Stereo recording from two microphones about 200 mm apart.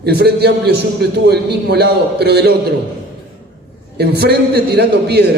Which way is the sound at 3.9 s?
55° right (ahead or behind).